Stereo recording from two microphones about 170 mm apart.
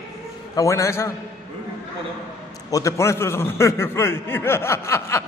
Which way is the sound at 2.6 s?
20° left (ahead or behind).